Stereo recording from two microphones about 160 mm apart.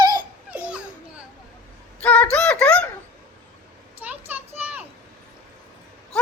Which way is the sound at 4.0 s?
10° right (ahead or behind).